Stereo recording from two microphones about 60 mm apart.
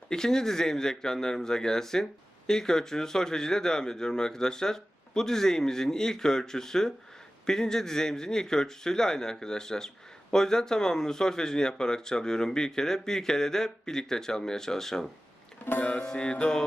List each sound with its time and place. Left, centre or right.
0.1 s speech: centre